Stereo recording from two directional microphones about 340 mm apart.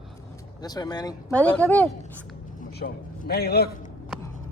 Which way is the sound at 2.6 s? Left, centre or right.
Left.